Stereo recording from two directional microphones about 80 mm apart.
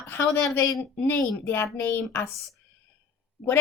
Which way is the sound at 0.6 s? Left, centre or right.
Left.